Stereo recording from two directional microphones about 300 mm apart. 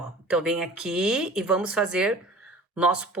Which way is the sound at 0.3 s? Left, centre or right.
Centre.